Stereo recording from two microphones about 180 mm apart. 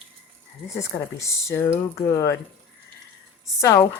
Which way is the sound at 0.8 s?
15° left (ahead or behind).